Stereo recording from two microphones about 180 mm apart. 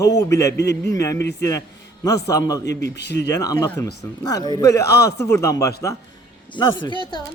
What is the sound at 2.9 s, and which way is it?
Speech, 70° left (ahead or behind).